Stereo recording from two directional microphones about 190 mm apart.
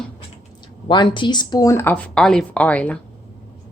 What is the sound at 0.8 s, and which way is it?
Speech, 25° left (ahead or behind).